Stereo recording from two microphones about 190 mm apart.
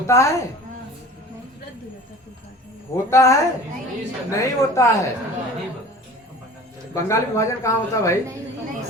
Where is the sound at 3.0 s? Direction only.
15° left (ahead or behind).